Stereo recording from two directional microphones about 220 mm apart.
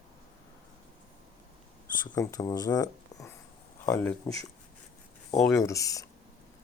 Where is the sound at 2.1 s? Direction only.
15° left (ahead or behind).